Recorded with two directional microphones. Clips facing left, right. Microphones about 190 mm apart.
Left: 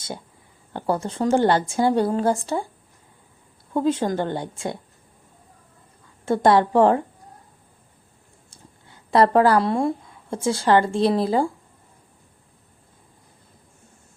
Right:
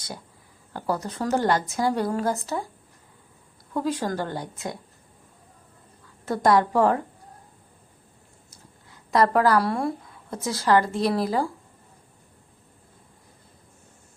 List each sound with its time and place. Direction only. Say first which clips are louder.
0.7 s a woman's voice: left 4 dB; 25° left (ahead or behind)
3.8 s a woman's voice: left 5 dB; 25° left (ahead or behind)
6.2 s a woman's voice: left 3 dB; 25° left (ahead or behind)
8.4 s speech: left 4 dB; 30° left (ahead or behind)